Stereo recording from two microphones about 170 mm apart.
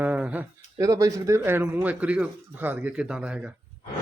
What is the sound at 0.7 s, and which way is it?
Speech, 20° right (ahead or behind).